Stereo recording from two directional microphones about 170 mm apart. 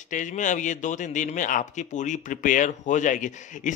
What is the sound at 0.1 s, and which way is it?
A man's voice, 50° left (ahead or behind).